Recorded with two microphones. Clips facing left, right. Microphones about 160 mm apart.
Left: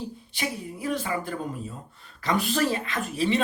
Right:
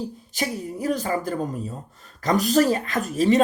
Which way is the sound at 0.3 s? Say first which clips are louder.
Right 5 dB; 40° right (ahead or behind).